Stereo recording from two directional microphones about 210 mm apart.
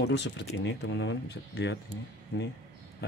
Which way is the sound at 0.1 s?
55° left (ahead or behind).